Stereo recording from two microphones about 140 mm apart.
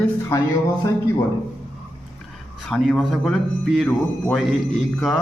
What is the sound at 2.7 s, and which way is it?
A man's voice, centre (ahead or behind).